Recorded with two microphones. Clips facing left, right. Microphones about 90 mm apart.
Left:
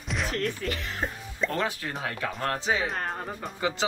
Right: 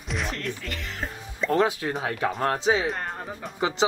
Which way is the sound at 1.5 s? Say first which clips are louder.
Right 12 dB; 20° right (ahead or behind).